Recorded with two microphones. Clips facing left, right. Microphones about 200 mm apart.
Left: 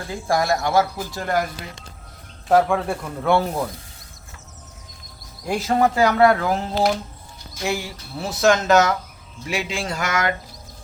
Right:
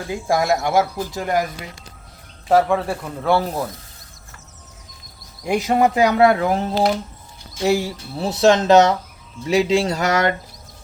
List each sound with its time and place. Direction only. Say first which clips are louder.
0.3 s speech: right 2 dB; 15° right (ahead or behind)
2.5 s speech: right 1 dB; centre (ahead or behind)
5.5 s speech: right 2 dB; 10° right (ahead or behind); by 10.3 s 35° right (ahead or behind)